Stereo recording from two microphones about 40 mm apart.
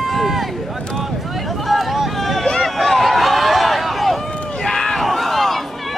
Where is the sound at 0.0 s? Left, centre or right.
Centre.